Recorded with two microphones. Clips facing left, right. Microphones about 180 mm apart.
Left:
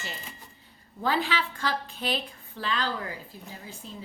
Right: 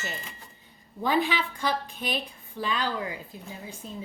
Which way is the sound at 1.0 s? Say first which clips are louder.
Right 2 dB; 20° right (ahead or behind).